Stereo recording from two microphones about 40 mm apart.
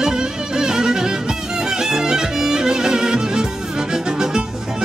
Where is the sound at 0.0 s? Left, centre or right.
Centre.